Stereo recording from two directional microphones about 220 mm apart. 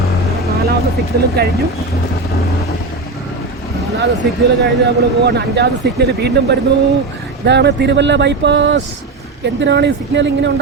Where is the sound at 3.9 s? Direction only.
55° right (ahead or behind).